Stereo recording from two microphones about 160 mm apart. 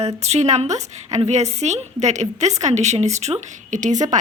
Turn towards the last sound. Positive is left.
turn(degrees=-50)  # may be behind; listen again after turning